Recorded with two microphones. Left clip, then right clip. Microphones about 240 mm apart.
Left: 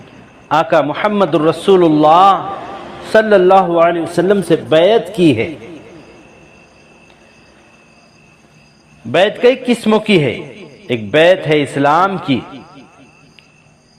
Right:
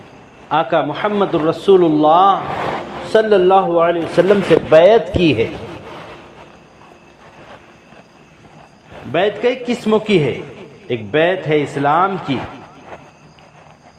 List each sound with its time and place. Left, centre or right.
0.4 s a man's voice: left
9.1 s a man's voice: left